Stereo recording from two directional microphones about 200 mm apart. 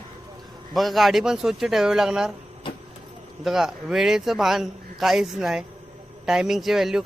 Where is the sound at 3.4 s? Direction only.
Centre (ahead or behind).